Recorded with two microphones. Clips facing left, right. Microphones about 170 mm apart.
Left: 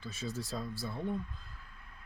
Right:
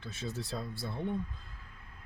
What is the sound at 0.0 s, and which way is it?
Speech, centre (ahead or behind).